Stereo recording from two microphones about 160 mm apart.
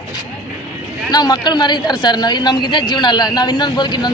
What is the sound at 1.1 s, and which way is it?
A man's voice, 25° left (ahead or behind).